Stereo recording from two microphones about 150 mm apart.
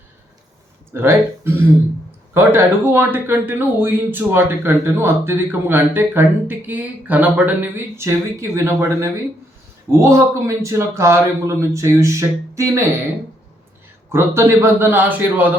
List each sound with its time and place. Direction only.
0.9 s speech: 15° right (ahead or behind)
14.1 s speech: 15° right (ahead or behind)